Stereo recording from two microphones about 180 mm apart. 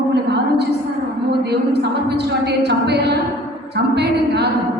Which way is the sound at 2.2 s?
70° right (ahead or behind).